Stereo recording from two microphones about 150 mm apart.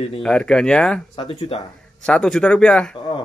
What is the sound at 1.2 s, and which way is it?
Speech, 40° left (ahead or behind).